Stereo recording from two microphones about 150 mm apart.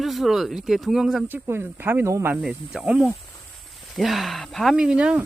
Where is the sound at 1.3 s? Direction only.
15° right (ahead or behind).